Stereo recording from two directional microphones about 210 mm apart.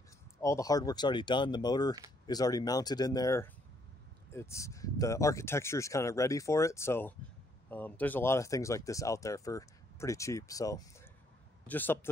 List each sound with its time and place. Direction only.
0.4 s speech: 15° left (ahead or behind)